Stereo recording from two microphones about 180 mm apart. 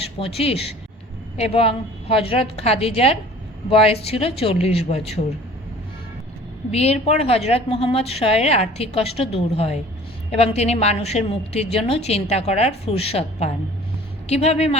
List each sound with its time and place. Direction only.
0.2 s a woman's voice: 30° left (ahead or behind)
6.7 s a woman's voice: 35° left (ahead or behind)